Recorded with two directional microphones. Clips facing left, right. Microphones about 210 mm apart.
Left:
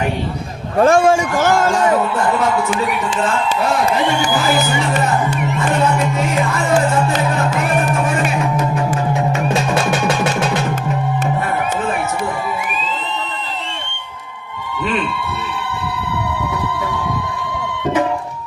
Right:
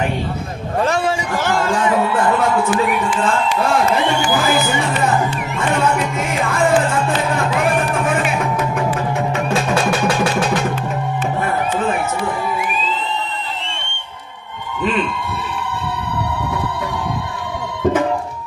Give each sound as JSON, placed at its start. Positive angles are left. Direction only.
{"t": 0.8, "sound": "a man's voice", "side_deg": 50}